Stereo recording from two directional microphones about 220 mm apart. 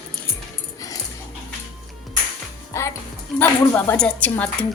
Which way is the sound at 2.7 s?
15° left (ahead or behind).